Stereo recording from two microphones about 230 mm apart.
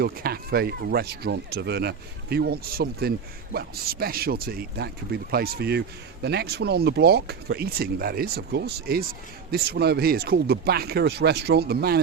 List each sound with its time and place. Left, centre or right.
0.0 s speech: right